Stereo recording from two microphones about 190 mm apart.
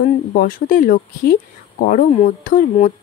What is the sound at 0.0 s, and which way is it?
Speech, 50° left (ahead or behind).